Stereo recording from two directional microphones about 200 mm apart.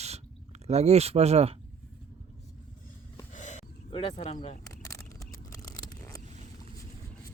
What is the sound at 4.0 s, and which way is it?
Speech, 30° left (ahead or behind).